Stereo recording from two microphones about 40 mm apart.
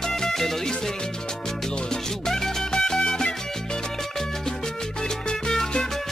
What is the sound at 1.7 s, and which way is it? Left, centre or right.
Music, centre.